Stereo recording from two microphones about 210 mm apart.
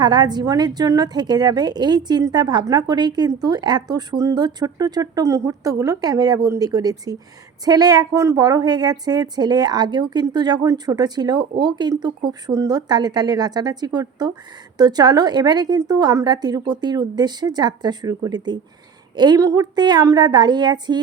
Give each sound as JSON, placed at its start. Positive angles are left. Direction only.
{"t": 0.0, "sound": "a woman's voice", "side_deg": -20}